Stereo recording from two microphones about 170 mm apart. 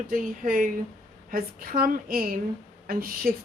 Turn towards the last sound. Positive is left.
turn(degrees=-55)  # may be behind; listen again after turning